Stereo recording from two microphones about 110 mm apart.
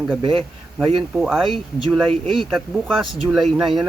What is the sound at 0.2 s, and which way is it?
Speech, 50° right (ahead or behind).